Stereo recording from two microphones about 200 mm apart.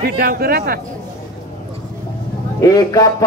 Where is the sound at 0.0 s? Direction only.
50° right (ahead or behind).